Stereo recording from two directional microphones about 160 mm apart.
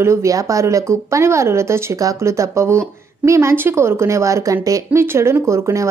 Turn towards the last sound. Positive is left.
turn(degrees=-20)  # may be behind; listen again after turning